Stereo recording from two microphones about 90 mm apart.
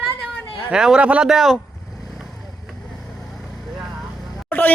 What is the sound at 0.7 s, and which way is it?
Speech, 10° right (ahead or behind).